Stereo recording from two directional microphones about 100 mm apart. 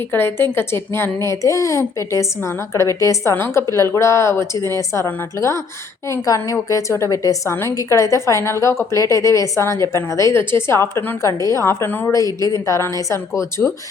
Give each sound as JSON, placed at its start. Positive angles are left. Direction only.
{"t": 0.1, "sound": "a woman's voice", "side_deg": 25}